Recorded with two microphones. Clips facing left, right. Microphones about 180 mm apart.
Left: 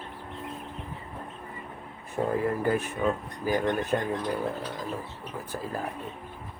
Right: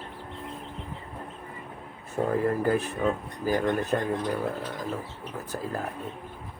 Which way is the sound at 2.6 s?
35° right (ahead or behind).